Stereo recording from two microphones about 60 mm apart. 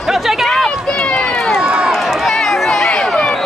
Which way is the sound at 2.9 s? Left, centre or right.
Centre.